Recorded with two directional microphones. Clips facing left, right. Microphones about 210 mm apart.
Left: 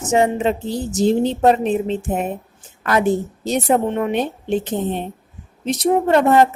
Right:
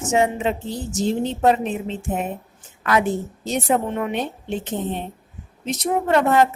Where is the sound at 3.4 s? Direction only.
35° left (ahead or behind).